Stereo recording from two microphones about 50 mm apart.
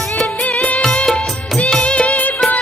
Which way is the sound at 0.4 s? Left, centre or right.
Left.